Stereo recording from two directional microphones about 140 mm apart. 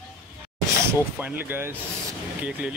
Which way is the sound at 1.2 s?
15° right (ahead or behind).